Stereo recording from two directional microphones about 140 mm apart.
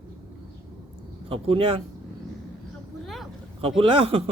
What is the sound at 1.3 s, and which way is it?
Speech, 40° right (ahead or behind).